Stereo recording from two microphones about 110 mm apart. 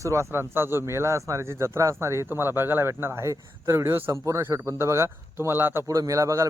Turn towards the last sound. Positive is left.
turn(degrees=-30)  # may be behind; listen again after turning